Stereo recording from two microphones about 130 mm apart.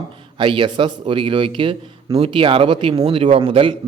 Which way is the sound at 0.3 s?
40° right (ahead or behind).